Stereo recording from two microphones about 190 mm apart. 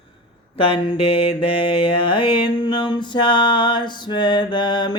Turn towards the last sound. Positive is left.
turn(degrees=25)  # may be behind; listen again after turning